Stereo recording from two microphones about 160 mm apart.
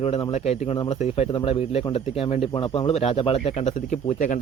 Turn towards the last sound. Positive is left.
turn(degrees=50)  # may be behind; listen again after turning